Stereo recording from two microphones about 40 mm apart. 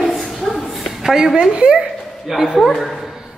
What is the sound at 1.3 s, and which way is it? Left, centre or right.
Speech, right.